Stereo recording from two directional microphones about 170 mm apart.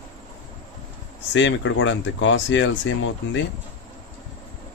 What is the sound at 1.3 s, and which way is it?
Speech, 90° left.